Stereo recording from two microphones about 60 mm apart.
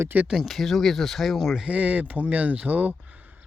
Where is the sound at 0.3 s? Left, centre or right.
Centre.